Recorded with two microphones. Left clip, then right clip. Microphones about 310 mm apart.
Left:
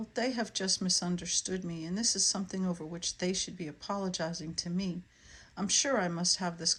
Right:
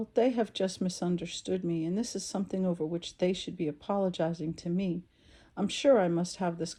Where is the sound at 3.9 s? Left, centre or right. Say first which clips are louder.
Right 5 dB; right.